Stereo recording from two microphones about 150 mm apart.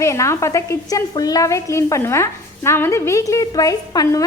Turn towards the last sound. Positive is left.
turn(degrees=25)  # may be behind; listen again after turning